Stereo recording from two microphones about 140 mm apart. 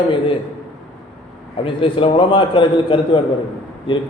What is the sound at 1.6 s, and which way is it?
A man's voice, 40° left (ahead or behind).